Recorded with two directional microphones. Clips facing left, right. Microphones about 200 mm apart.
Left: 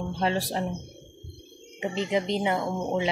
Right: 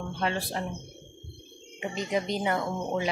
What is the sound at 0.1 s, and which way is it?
Speech, 35° left (ahead or behind).